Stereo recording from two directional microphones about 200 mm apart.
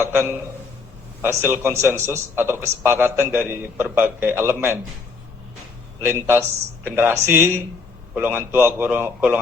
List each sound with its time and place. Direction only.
0.0 s speech: 10° right (ahead or behind)
6.1 s speech: 10° right (ahead or behind)